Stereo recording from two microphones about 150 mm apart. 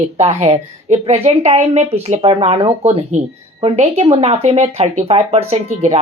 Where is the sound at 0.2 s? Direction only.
45° right (ahead or behind).